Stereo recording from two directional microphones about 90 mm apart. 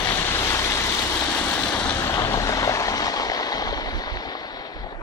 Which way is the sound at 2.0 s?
35° left (ahead or behind).